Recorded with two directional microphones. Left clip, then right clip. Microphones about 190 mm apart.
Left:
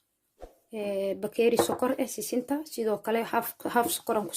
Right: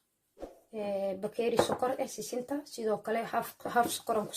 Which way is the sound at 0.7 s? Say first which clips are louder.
Left 3 dB; 50° left (ahead or behind).